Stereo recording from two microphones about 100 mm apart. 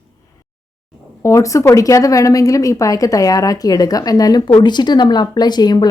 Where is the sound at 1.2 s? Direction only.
30° left (ahead or behind).